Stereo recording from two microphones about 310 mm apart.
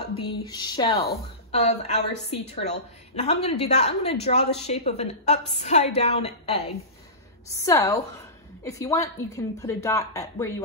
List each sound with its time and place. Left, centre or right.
0.1 s a woman's voice: centre
7.5 s speech: centre